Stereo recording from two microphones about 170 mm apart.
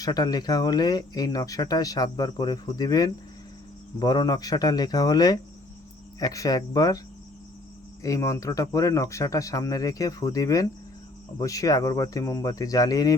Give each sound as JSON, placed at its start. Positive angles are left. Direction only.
{"t": 0.0, "sound": "speech", "side_deg": 20}
{"t": 8.0, "sound": "speech", "side_deg": 20}